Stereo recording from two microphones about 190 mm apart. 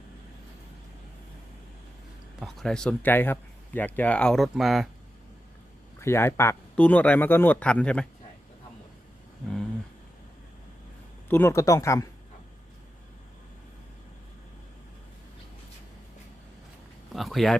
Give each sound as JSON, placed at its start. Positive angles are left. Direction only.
{"t": 2.4, "sound": "speech", "side_deg": 0}
{"t": 6.0, "sound": "speech", "side_deg": 15}
{"t": 11.3, "sound": "speech", "side_deg": 10}
{"t": 17.1, "sound": "a sound", "side_deg": 0}